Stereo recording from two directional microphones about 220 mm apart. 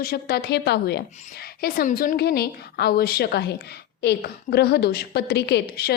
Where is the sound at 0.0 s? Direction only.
45° left (ahead or behind).